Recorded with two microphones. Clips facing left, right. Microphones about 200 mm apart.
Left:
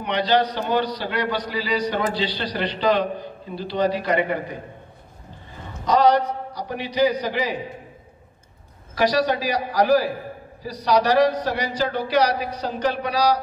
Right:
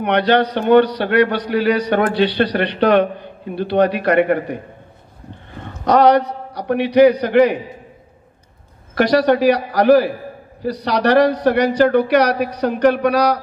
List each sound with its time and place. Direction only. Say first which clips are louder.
0.0 s a man's voice: right 5 dB; 60° right (ahead or behind)
8.9 s a man's voice: right 6 dB; 60° right (ahead or behind)